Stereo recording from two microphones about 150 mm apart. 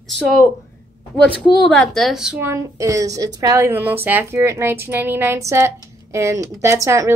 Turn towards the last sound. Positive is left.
turn(degrees=-20)  # may be behind; listen again after turning